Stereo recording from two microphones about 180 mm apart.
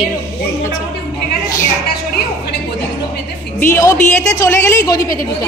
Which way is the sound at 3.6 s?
15° left (ahead or behind).